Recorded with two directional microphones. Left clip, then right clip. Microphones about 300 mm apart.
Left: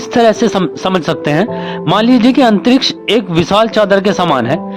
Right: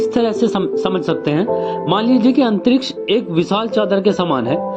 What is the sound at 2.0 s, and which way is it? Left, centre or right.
Speech, left.